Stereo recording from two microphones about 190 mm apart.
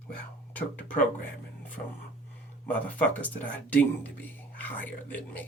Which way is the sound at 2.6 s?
10° left (ahead or behind).